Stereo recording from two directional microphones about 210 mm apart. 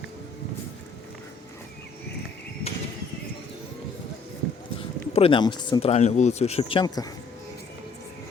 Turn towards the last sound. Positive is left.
turn(degrees=20)  # may be behind; listen again after turning